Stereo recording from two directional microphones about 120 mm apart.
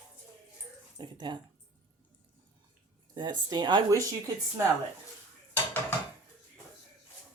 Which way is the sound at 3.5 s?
35° right (ahead or behind).